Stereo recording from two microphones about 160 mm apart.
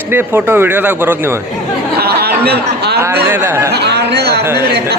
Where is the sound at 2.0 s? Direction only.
80° right.